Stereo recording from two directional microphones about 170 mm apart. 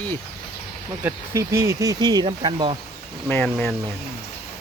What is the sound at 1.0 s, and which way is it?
Speech, 15° right (ahead or behind).